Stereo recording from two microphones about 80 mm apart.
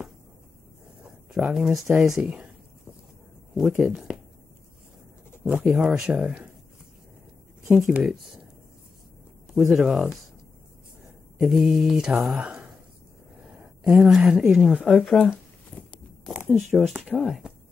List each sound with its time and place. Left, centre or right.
1.0 s speech: centre
3.7 s speech: centre
5.4 s speech: centre
7.6 s speech: centre
9.5 s speech: centre
11.3 s speech: centre
13.8 s speech: centre
15.0 s speech: centre
15.7 s walk: left
16.5 s speech: centre
16.9 s speech: centre
17.2 s speech: centre